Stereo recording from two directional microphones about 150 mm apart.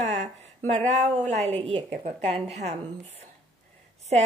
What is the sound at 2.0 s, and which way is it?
Speech, 50° right (ahead or behind).